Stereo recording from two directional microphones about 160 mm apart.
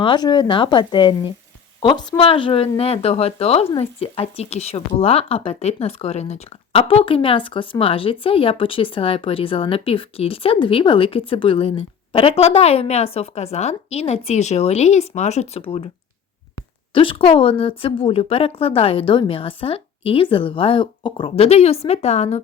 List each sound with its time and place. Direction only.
0.0 s a woman's voice: 30° left (ahead or behind)
16.9 s a woman's voice: 35° left (ahead or behind)